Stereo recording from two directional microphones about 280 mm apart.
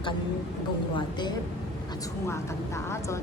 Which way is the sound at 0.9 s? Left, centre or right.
Centre.